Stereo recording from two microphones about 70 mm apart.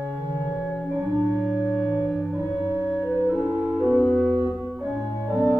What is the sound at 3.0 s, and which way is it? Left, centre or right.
Music, left.